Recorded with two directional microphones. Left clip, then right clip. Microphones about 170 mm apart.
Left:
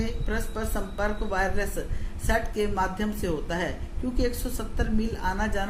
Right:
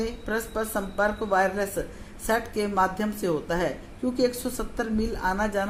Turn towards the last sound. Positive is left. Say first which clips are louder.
# right 3 dB
turn(degrees=-30)  # may be behind; listen again after turning